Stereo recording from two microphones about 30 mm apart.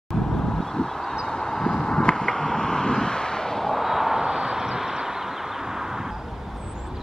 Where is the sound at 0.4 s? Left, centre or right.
Left.